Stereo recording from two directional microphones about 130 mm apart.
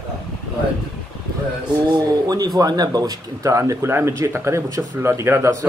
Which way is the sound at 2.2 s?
30° right (ahead or behind).